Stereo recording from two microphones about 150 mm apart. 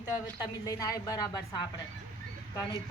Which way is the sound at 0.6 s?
25° left (ahead or behind).